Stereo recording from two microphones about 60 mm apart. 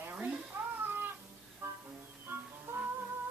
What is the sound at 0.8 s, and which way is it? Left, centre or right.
Music, right.